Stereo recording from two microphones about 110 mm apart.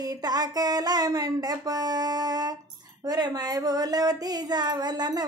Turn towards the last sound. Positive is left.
turn(degrees=-40)  # may be behind; listen again after turning